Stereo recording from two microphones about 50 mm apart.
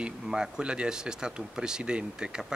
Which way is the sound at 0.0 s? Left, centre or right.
Centre.